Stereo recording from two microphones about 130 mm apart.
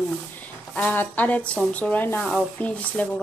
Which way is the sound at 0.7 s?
10° left (ahead or behind).